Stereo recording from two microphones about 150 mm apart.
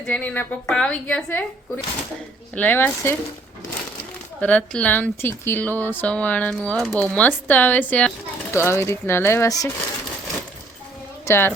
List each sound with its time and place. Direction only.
0.0 s speech: 10° left (ahead or behind)
4.4 s speech: 10° left (ahead or behind)
11.3 s speech: 15° left (ahead or behind)